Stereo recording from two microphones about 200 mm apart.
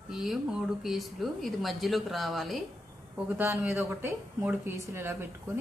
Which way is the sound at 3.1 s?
10° right (ahead or behind).